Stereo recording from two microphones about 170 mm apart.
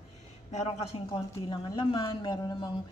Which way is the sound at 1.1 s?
25° left (ahead or behind).